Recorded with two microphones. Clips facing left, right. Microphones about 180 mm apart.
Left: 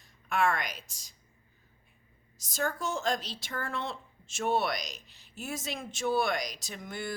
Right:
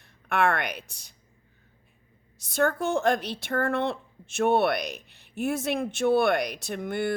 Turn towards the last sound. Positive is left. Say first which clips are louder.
# right 10 dB
turn(degrees=-60)  # may be behind; listen again after turning